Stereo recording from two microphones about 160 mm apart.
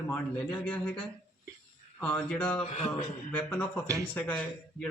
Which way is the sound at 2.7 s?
45° left (ahead or behind).